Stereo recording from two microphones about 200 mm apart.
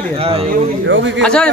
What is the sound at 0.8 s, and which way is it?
Speech, 70° right (ahead or behind).